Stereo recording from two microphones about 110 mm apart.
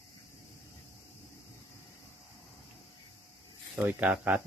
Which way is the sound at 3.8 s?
15° right (ahead or behind).